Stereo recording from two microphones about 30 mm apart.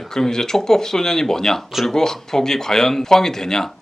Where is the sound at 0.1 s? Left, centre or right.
Centre.